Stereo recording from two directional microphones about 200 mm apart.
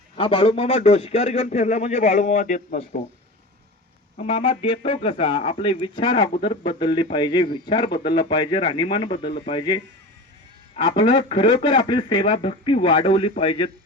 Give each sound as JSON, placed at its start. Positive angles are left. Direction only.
{"t": 0.2, "sound": "a man's voice", "side_deg": 25}
{"t": 4.2, "sound": "speech", "side_deg": 30}